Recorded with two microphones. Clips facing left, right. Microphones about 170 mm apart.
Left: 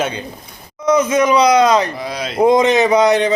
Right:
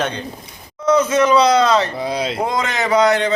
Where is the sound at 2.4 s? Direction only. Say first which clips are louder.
Left 9 dB; 20° left (ahead or behind).